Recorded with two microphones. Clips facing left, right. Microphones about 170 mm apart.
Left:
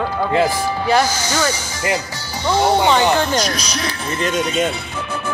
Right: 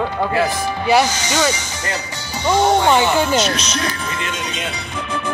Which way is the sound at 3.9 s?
35° left (ahead or behind).